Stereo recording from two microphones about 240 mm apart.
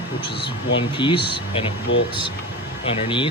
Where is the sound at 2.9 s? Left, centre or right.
Left.